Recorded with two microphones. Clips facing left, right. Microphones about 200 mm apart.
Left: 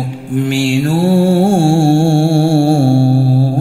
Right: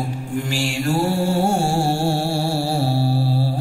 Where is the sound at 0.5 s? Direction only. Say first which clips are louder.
Left 8 dB; 90° left.